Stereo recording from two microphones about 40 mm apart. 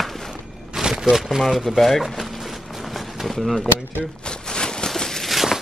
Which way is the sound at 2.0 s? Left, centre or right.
Centre.